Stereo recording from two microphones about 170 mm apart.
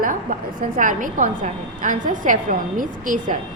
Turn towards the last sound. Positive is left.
turn(degrees=-50)  # may be behind; listen again after turning